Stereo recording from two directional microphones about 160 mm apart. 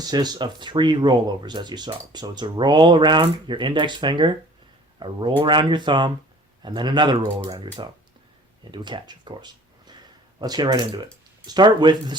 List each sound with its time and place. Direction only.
0.0 s speech: 25° right (ahead or behind)